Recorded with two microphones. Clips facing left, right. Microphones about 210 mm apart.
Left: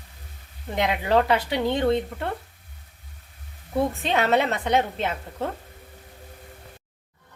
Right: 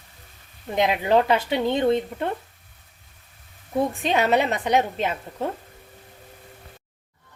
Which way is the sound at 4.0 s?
15° right (ahead or behind).